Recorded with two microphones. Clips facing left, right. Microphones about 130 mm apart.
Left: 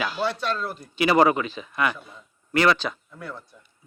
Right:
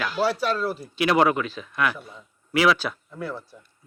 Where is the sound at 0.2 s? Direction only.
10° right (ahead or behind).